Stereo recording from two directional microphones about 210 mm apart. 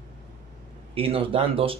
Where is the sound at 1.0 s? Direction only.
25° right (ahead or behind).